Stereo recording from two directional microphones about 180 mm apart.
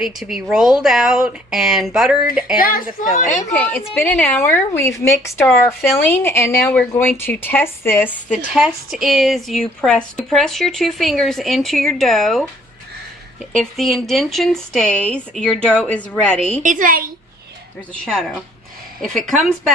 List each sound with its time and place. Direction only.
0.0 s a woman's voice: centre (ahead or behind)
2.6 s a woman's voice: 55° left (ahead or behind)
3.5 s a woman's voice: 10° left (ahead or behind)
4.4 s speech: 15° left (ahead or behind)
8.5 s a woman's voice: 5° right (ahead or behind)
16.6 s a child's voice: 50° right (ahead or behind)
18.0 s a woman's voice: centre (ahead or behind)